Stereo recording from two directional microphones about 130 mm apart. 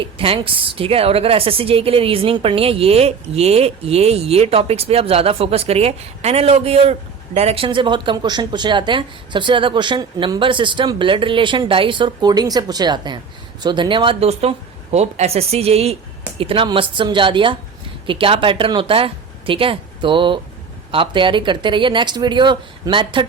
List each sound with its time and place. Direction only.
0.0 s a woman's voice: 45° right (ahead or behind)